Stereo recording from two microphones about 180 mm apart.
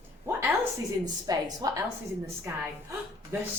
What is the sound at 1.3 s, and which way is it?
Speech, 20° right (ahead or behind).